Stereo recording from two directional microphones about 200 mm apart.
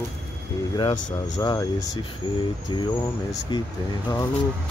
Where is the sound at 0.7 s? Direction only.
20° left (ahead or behind).